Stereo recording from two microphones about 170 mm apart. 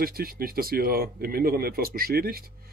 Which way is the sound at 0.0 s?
60° right (ahead or behind).